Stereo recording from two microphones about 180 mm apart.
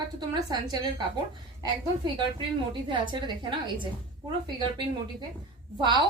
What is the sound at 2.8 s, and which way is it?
A woman's voice, 25° right (ahead or behind).